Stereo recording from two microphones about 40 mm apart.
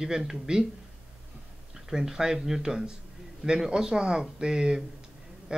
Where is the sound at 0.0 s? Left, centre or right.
Centre.